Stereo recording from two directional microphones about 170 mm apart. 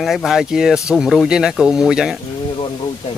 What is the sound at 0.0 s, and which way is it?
Speech, centre (ahead or behind).